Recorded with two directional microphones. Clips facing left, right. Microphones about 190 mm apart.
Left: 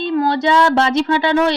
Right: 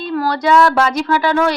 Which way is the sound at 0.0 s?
20° left (ahead or behind).